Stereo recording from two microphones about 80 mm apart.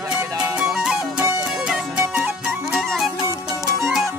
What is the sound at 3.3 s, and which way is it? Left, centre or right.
Music, right.